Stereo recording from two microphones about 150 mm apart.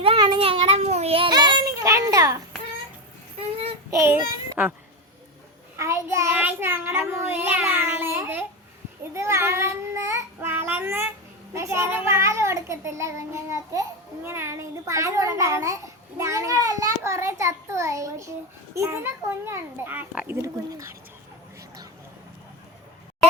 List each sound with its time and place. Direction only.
0.0 s a sound: 35° right (ahead or behind)
1.3 s child singing: 30° right (ahead or behind)
3.9 s a child's voice: 15° right (ahead or behind)
5.7 s a child's voice: 20° right (ahead or behind)
9.1 s child singing: 20° right (ahead or behind)
11.5 s a child's voice: 20° right (ahead or behind)